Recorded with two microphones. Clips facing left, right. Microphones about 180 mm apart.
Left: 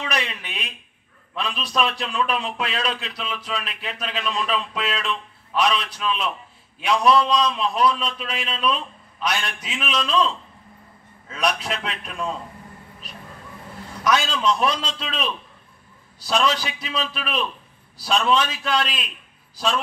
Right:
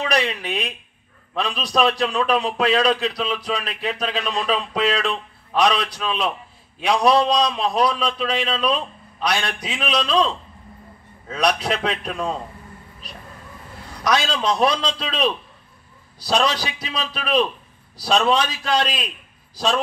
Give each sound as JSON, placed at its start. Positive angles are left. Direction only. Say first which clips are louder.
{"t": 0.0, "sound": "a man's voice", "louder": "right 6 dB", "side_deg": -35}
{"t": 11.2, "sound": "a man's voice", "louder": "right 4 dB", "side_deg": -35}
{"t": 14.0, "sound": "a man's voice", "louder": "even", "side_deg": -35}